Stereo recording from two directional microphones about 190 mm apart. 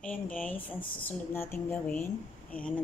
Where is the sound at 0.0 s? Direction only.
5° left (ahead or behind).